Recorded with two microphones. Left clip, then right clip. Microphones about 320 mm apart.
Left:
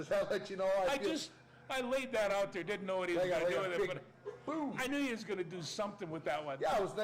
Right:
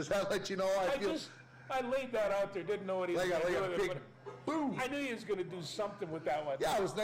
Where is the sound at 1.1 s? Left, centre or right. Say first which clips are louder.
Even; left.